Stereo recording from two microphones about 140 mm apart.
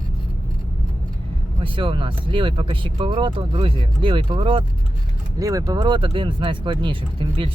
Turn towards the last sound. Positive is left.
turn(degrees=-40)  # may be behind; listen again after turning